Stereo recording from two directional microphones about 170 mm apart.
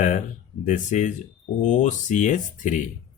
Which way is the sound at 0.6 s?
45° left (ahead or behind).